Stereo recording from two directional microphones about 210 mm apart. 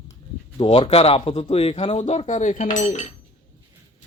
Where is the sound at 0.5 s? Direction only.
25° left (ahead or behind).